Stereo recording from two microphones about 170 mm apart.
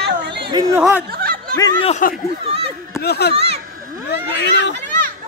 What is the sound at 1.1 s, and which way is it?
Snicker, 60° right (ahead or behind).